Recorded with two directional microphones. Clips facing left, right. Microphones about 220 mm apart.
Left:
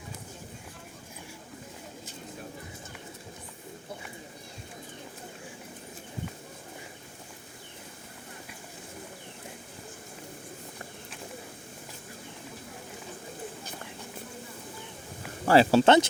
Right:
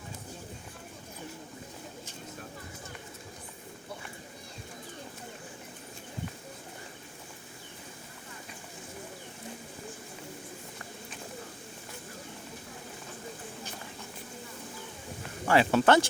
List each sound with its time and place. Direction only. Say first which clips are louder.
15.4 s speech: left 4 dB; 35° left (ahead or behind)